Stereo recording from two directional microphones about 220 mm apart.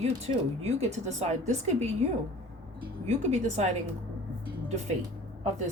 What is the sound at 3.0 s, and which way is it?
Speech, 30° right (ahead or behind).